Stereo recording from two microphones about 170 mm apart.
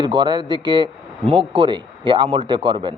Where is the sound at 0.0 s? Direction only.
25° right (ahead or behind).